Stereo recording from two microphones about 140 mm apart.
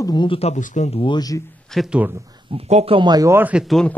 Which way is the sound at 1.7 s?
Centre (ahead or behind).